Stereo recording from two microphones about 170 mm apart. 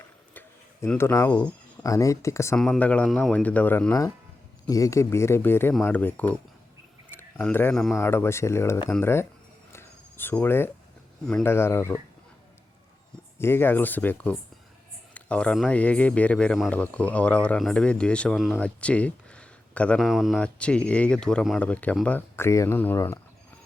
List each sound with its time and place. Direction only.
0.3 s tick-tock: 10° left (ahead or behind)
1.8 s speech: 20° left (ahead or behind)
2.6 s speech: 5° left (ahead or behind)
7.9 s speech: 15° left (ahead or behind)
9.7 s cricket: 10° left (ahead or behind)
11.4 s speech: 15° left (ahead or behind)
13.4 s speech: 15° left (ahead or behind)